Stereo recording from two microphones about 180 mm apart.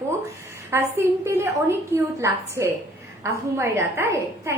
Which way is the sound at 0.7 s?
15° right (ahead or behind).